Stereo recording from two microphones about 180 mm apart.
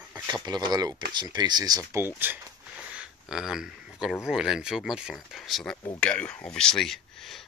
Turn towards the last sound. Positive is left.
turn(degrees=0)  # may be behind; listen again after turning